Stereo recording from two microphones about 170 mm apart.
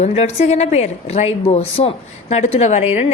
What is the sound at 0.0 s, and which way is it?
A woman's voice, 40° left (ahead or behind).